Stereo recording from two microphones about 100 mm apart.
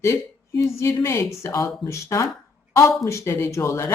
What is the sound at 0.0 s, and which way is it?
A woman's voice, 30° left (ahead or behind).